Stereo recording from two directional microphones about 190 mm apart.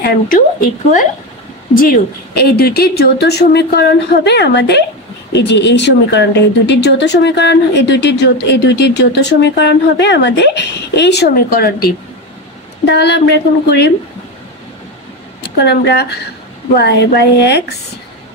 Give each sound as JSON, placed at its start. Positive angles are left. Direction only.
{"t": 0.0, "sound": "a woman's voice", "side_deg": 45}
{"t": 15.4, "sound": "speech", "side_deg": 60}